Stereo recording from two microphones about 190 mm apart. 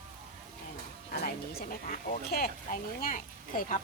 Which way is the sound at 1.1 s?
50° left (ahead or behind).